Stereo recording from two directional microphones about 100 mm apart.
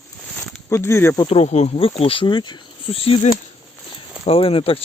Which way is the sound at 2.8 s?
70° left (ahead or behind).